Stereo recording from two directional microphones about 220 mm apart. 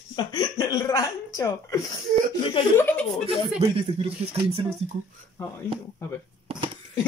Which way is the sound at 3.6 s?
25° right (ahead or behind).